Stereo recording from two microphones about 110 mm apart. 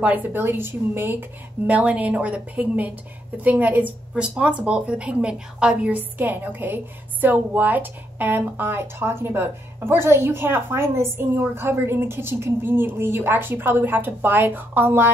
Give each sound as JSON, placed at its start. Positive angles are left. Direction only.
{"t": 0.0, "sound": "a woman's voice", "side_deg": -15}